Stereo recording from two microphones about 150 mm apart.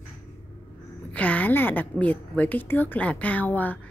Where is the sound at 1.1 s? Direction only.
10° left (ahead or behind).